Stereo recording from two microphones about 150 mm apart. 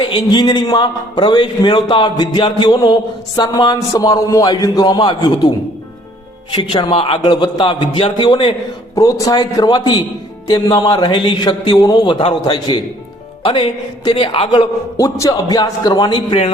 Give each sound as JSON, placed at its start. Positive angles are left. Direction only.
{"t": 0.0, "sound": "a man's voice", "side_deg": 30}
{"t": 6.5, "sound": "a man's voice", "side_deg": 35}
{"t": 9.0, "sound": "a man's voice", "side_deg": 20}
{"t": 14.9, "sound": "a man's voice", "side_deg": 20}